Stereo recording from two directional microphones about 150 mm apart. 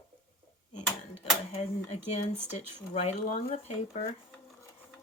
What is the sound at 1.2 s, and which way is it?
Speech, 45° left (ahead or behind).